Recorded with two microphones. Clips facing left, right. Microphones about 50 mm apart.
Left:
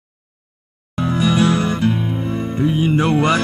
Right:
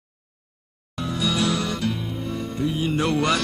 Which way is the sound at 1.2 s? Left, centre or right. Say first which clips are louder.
Left 7 dB; left.